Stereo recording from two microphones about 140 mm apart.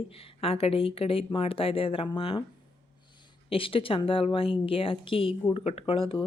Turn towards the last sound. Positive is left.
turn(degrees=40)  # may be behind; listen again after turning